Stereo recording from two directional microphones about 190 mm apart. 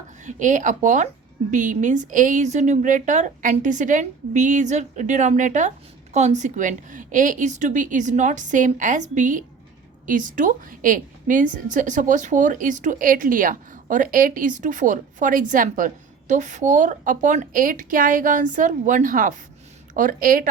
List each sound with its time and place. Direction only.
0.3 s a woman's voice: 40° right (ahead or behind)